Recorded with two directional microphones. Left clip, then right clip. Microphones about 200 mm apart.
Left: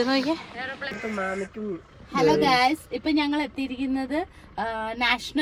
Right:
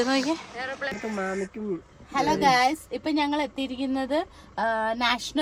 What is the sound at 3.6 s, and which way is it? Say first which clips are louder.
Speech: even; 30° right (ahead or behind).